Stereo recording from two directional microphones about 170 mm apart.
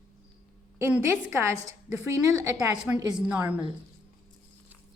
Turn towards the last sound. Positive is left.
turn(degrees=-10)  # may be behind; listen again after turning